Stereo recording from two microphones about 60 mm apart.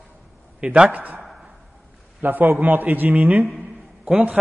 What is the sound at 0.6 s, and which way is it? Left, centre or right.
Speech, centre.